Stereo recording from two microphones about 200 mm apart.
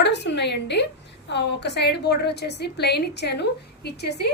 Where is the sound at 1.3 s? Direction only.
60° left (ahead or behind).